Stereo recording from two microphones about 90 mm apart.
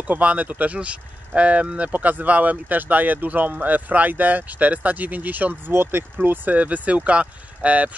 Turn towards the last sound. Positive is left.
turn(degrees=-15)  # may be behind; listen again after turning